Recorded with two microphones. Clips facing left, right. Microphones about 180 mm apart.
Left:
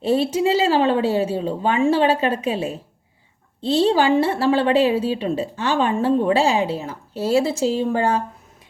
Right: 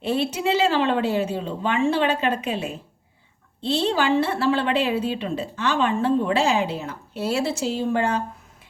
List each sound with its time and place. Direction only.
0.0 s a woman's voice: 40° left (ahead or behind)